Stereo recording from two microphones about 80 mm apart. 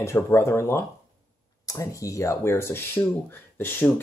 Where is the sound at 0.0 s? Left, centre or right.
Left.